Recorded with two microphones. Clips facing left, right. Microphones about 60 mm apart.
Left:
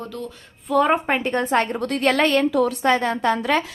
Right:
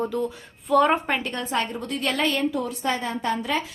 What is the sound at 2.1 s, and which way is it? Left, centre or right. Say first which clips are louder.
A woman's voice: left 5 dB; left.